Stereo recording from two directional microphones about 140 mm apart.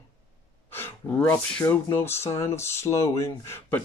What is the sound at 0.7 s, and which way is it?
Speech, 15° left (ahead or behind).